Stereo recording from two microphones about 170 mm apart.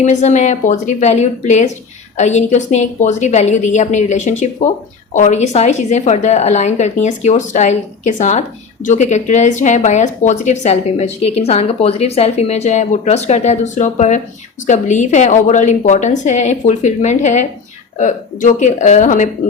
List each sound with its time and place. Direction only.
0.0 s a woman's voice: 45° left (ahead or behind)